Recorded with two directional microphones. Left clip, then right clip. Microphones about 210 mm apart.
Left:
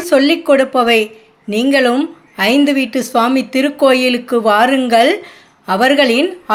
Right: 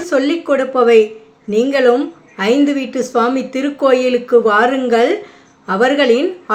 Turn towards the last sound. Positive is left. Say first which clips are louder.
# even
turn(degrees=40)  # may be behind; listen again after turning